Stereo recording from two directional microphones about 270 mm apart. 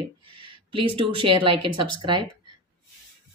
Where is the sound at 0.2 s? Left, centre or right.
Right.